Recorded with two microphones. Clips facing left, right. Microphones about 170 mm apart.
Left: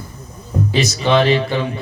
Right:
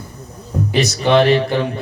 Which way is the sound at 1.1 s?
60° right (ahead or behind).